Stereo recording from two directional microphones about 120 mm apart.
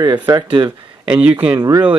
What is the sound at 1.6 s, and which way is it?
Speech, 30° right (ahead or behind).